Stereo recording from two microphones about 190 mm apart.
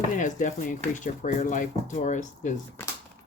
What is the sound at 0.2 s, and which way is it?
Speech, 40° left (ahead or behind).